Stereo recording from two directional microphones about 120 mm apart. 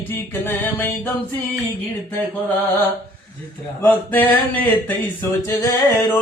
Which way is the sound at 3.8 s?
15° left (ahead or behind).